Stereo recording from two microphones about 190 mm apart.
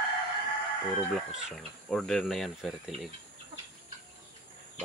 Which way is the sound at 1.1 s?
Centre (ahead or behind).